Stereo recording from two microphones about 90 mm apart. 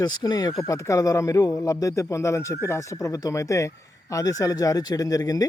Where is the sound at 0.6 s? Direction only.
35° left (ahead or behind).